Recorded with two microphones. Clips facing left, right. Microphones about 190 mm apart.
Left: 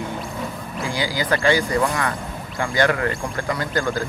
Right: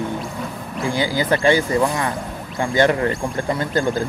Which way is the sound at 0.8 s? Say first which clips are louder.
Right 4 dB; 20° right (ahead or behind).